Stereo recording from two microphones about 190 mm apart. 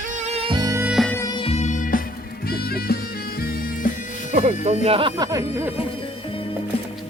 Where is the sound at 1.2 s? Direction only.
20° left (ahead or behind); by 3.9 s 45° left (ahead or behind).